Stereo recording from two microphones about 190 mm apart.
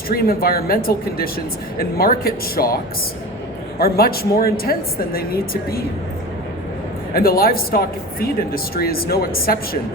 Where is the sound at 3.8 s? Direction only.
50° left (ahead or behind).